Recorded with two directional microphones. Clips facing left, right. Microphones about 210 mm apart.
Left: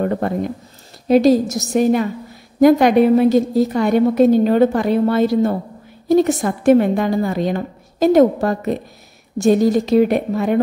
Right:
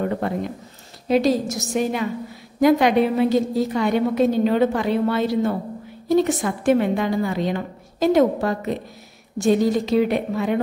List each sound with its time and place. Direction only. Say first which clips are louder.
0.0 s a woman's voice: left 4 dB; 45° left (ahead or behind)